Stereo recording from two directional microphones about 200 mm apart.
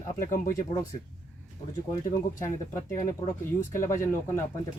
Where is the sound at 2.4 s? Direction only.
15° left (ahead or behind).